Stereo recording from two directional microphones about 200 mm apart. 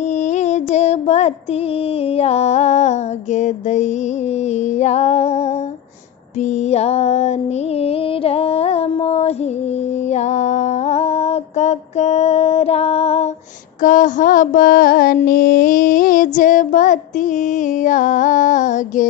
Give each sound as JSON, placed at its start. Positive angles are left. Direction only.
{"t": 0.3, "sound": "a sound", "side_deg": 35}
{"t": 2.1, "sound": "music", "side_deg": 30}
{"t": 6.7, "sound": "music", "side_deg": 30}
{"t": 7.8, "sound": "female singing", "side_deg": 30}
{"t": 13.8, "sound": "child singing", "side_deg": 40}
{"t": 17.8, "sound": "music", "side_deg": 40}